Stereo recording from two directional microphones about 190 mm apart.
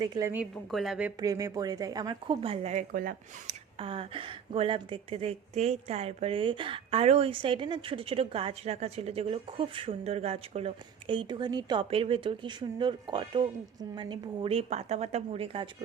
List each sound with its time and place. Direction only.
0.0 s a woman's voice: 20° right (ahead or behind)
0.5 s a woman's voice: centre (ahead or behind)
1.2 s a woman's voice: 20° right (ahead or behind); by 3.5 s 50° right (ahead or behind)
3.8 s a woman's voice: 30° right (ahead or behind)